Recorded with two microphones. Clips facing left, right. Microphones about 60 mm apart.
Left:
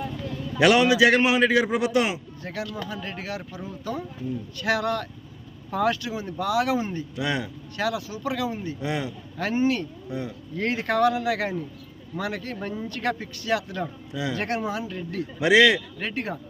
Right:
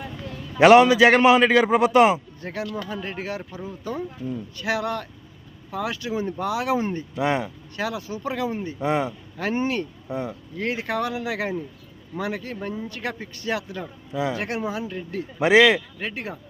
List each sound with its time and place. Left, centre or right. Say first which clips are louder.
0.6 s a man's voice: right 5 dB; right; by 6.0 s centre
6.0 s a man's voice: right 3 dB; right
10.6 s speech: left 4 dB; centre
14.3 s speech: even; centre
15.4 s a man's voice: right 2 dB; right
15.6 s speech: right 1 dB; centre